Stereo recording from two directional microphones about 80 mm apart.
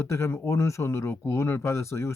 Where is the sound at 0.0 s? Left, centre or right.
Left.